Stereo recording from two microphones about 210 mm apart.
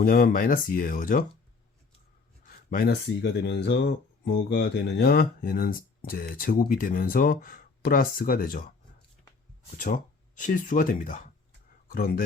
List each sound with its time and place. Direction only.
0.0 s speech: 45° left (ahead or behind)
2.6 s speech: 45° left (ahead or behind)
9.7 s speech: 40° left (ahead or behind)